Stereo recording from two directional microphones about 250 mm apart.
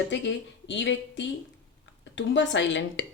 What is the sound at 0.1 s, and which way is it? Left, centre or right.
Speech, left.